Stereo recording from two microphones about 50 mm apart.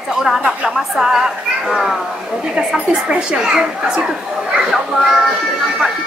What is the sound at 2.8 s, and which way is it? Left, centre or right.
A child's voice, centre.